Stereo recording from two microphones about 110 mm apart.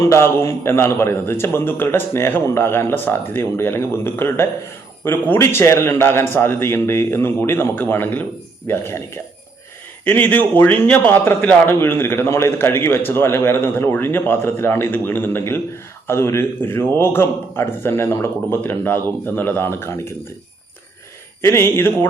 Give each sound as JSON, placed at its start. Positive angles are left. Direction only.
{"t": 0.0, "sound": "a man's voice", "side_deg": 25}
{"t": 21.4, "sound": "a man's voice", "side_deg": 25}